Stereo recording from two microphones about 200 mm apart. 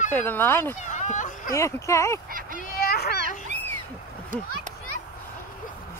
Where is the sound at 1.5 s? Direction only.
15° left (ahead or behind).